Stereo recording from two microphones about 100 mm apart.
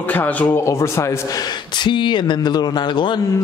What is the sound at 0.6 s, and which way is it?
Speech, 30° left (ahead or behind).